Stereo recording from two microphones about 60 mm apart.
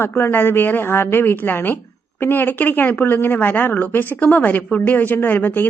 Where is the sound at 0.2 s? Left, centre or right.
Left.